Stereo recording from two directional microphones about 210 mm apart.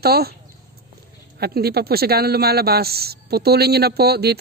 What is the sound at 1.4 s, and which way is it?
Speech, 50° right (ahead or behind).